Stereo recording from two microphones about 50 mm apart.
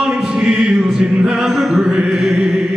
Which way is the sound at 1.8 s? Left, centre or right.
Centre.